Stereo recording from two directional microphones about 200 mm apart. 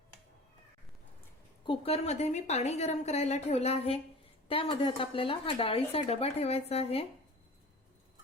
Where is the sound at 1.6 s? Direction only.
25° left (ahead or behind).